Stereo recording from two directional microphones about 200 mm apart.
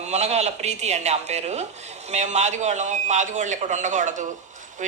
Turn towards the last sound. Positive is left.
turn(degrees=-40)  # may be behind; listen again after turning